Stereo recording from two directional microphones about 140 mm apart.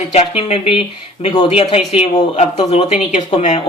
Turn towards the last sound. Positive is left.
turn(degrees=50)  # may be behind; listen again after turning